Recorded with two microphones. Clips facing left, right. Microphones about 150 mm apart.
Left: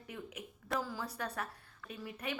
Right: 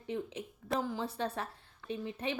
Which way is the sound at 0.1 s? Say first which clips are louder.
Right 8 dB; 25° right (ahead or behind).